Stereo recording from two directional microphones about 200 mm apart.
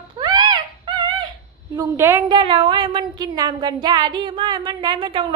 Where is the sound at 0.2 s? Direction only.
20° right (ahead or behind).